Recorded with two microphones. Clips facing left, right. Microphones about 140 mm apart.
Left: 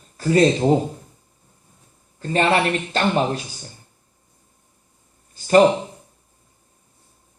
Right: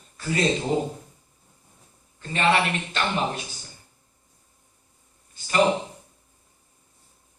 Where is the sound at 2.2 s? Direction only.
40° left (ahead or behind).